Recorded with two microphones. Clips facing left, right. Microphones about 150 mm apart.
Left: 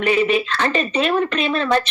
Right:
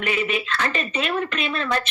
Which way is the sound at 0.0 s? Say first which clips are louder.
Left 7 dB; 30° left (ahead or behind).